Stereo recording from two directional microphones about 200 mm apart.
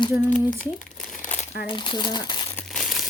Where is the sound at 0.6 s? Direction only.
40° left (ahead or behind).